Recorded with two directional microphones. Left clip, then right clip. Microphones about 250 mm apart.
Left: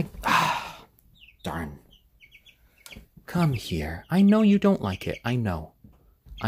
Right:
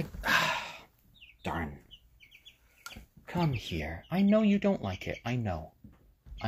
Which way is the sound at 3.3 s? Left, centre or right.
Left.